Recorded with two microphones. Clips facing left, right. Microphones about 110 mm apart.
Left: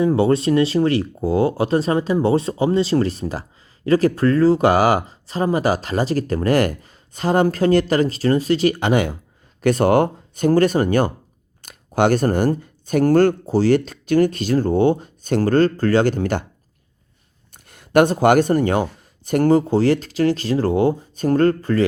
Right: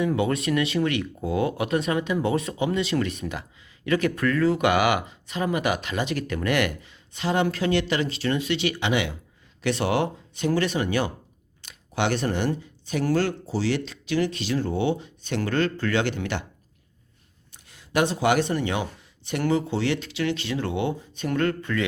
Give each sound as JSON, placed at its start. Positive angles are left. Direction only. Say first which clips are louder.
{"t": 0.0, "sound": "speech", "louder": "left 7 dB", "side_deg": 30}
{"t": 17.7, "sound": "speech", "louder": "left 9 dB", "side_deg": 55}